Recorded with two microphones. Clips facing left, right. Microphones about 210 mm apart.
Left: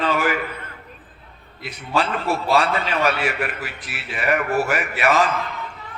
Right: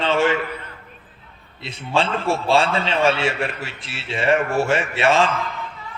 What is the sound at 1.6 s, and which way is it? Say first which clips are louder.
A man's voice: right 1 dB; 25° right (ahead or behind).